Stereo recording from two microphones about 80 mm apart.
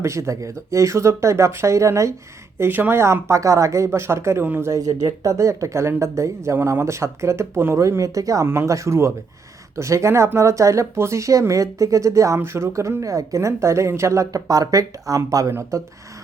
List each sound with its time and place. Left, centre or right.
0.0 s speech: right
2.6 s speech: right
3.0 s speech: right
12.4 s speech: right